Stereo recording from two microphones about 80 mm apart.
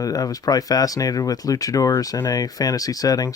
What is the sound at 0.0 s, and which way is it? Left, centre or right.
Speech, left.